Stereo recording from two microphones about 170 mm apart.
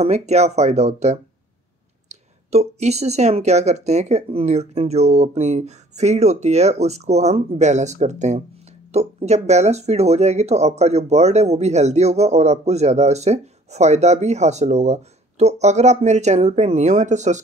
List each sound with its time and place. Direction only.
0.0 s speech: 40° right (ahead or behind)